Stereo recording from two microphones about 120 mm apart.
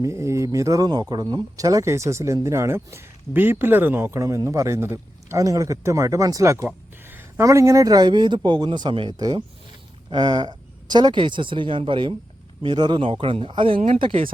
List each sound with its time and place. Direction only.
0.0 s speech: 25° right (ahead or behind); by 14.3 s 55° right (ahead or behind)